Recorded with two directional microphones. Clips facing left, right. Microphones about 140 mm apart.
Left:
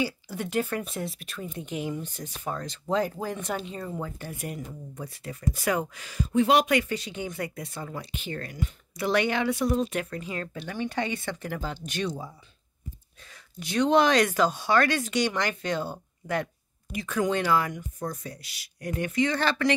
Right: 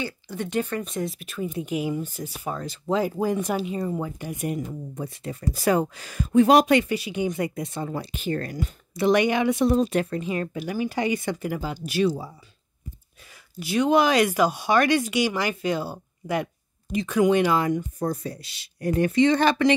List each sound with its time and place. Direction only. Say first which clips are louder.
0.0 s speech: left 1 dB; 5° left (ahead or behind); by 6.1 s 35° right (ahead or behind)
6.1 s speech: right 5 dB; 45° right (ahead or behind)
6.9 s speech: right 6 dB; 10° right (ahead or behind); by 8.7 s 40° right (ahead or behind)
8.9 s speech: right 5 dB; 20° right (ahead or behind)
9.8 s speech: right 6 dB; 35° right (ahead or behind)
10.2 s speech: right 7 dB; 15° right (ahead or behind)
13.3 s speech: right 5 dB; 5° right (ahead or behind)
16.9 s speech: right 7 dB; 20° right (ahead or behind)
19.2 s speech: right 6 dB; 20° right (ahead or behind)